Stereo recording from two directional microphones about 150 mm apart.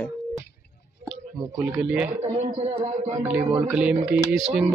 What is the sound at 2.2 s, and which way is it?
A man's voice, 40° right (ahead or behind).